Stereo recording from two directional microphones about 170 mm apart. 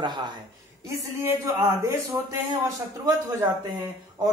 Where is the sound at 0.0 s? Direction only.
25° right (ahead or behind).